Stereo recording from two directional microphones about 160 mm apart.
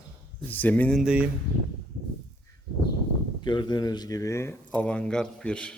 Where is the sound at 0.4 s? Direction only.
10° left (ahead or behind).